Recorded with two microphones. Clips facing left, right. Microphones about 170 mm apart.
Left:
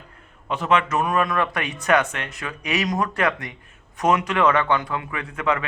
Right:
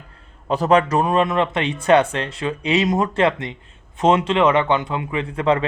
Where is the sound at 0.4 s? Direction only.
35° right (ahead or behind).